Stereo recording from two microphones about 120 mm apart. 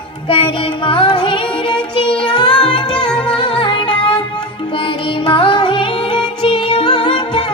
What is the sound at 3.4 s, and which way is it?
Music, 45° left (ahead or behind).